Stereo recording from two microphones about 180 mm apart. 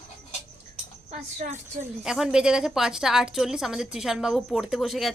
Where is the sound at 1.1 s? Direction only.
40° right (ahead or behind).